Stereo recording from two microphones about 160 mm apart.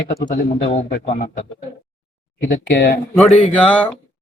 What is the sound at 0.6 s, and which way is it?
Speech, 40° left (ahead or behind).